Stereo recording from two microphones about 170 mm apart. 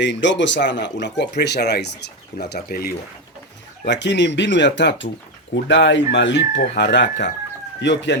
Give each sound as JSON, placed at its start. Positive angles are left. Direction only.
{"t": 0.0, "sound": "speech", "side_deg": 90}
{"t": 3.8, "sound": "speech", "side_deg": 90}